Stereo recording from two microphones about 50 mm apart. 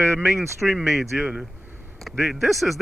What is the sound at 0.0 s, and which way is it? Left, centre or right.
Speech, right.